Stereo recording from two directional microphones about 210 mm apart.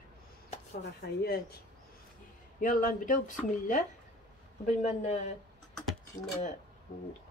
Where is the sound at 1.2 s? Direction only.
50° left (ahead or behind).